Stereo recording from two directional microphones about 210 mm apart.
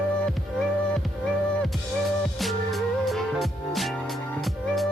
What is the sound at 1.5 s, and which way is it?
Music, centre (ahead or behind).